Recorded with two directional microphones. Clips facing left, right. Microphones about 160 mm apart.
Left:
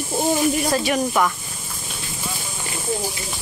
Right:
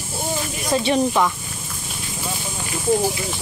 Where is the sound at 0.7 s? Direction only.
25° right (ahead or behind).